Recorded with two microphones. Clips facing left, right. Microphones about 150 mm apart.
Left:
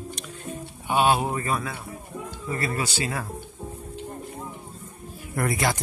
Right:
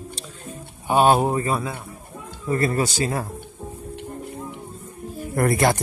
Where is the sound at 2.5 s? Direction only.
40° right (ahead or behind).